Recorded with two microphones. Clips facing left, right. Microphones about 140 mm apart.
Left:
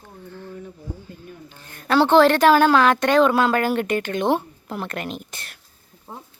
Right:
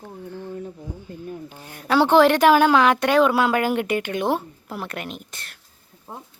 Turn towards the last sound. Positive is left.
turn(degrees=0)  # may be behind; listen again after turning